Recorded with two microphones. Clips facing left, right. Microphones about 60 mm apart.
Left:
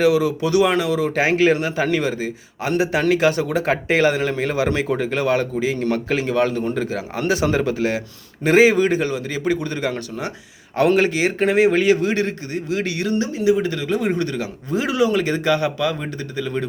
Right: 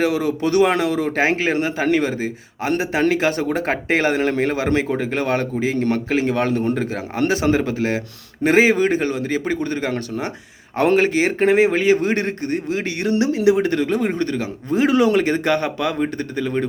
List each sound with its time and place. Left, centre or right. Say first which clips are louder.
0.0 s speech: left 2 dB; right
4.9 s speech: left 1 dB; centre
5.1 s a man's voice: left 2 dB; right
6.7 s speech: right 2 dB; right
12.7 s speech: left 1 dB; right
13.1 s speech: right 3 dB; right
14.2 s a man's voice: right 1 dB; right